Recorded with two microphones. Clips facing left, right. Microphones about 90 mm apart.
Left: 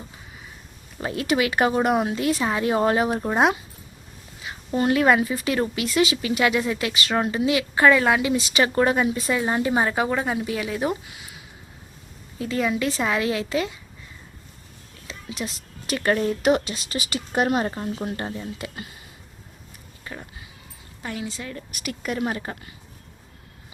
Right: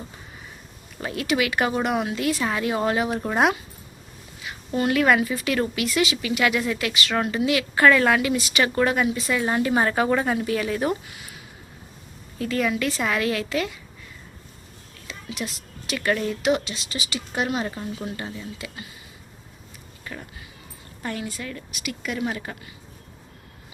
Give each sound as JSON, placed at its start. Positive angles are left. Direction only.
{"t": 1.0, "sound": "speech", "side_deg": 30}
{"t": 3.2, "sound": "a woman's voice", "side_deg": 20}
{"t": 12.4, "sound": "a woman's voice", "side_deg": 20}
{"t": 15.0, "sound": "speech", "side_deg": 35}
{"t": 20.1, "sound": "speech", "side_deg": 25}
{"t": 21.0, "sound": "a woman's voice", "side_deg": 15}
{"t": 21.8, "sound": "speech", "side_deg": 40}